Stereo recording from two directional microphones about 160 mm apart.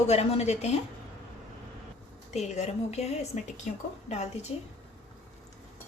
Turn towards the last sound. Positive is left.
turn(degrees=45)  # may be behind; listen again after turning